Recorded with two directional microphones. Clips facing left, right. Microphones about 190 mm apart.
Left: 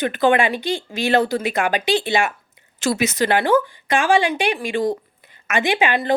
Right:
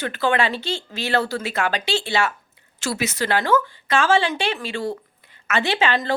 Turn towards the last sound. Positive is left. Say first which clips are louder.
# left 2 dB
turn(degrees=15)  # may be behind; listen again after turning